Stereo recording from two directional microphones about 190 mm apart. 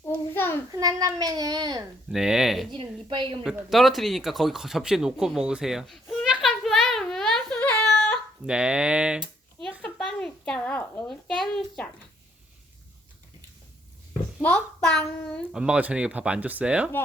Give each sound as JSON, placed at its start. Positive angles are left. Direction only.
{"t": 0.0, "sound": "a sound", "side_deg": 10}
{"t": 0.7, "sound": "a child's voice", "side_deg": -20}
{"t": 2.1, "sound": "speech", "side_deg": -5}
{"t": 2.7, "sound": "a child's voice", "side_deg": -25}
{"t": 3.4, "sound": "a sound", "side_deg": 0}
{"t": 8.4, "sound": "speech", "side_deg": -5}
{"t": 9.8, "sound": "a sound", "side_deg": 5}
{"t": 11.1, "sound": "speech", "side_deg": 0}
{"t": 14.4, "sound": "a child's voice", "side_deg": 5}
{"t": 15.5, "sound": "speech", "side_deg": -5}